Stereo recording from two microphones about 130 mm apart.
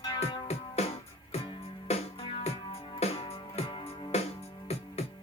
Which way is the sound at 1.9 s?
50° left (ahead or behind).